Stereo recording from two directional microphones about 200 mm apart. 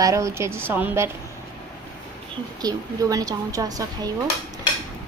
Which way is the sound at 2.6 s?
15° right (ahead or behind).